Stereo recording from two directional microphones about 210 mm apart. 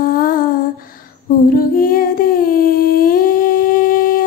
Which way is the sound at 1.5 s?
45° left (ahead or behind).